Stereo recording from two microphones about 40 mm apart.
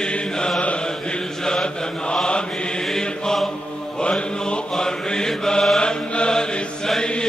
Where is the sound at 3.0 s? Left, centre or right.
Centre.